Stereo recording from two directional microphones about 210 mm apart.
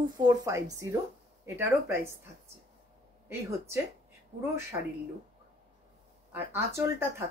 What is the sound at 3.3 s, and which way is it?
Speech, 10° right (ahead or behind).